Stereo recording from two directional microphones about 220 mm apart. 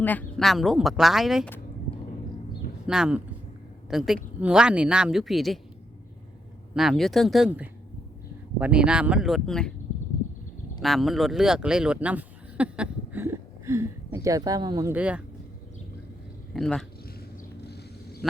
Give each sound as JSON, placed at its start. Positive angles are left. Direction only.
{"t": 0.0, "sound": "speech", "side_deg": 10}
{"t": 2.8, "sound": "speech", "side_deg": -5}
{"t": 6.7, "sound": "speech", "side_deg": 0}
{"t": 10.8, "sound": "speech", "side_deg": 0}
{"t": 16.6, "sound": "speech", "side_deg": 5}
{"t": 17.2, "sound": "a sound", "side_deg": 45}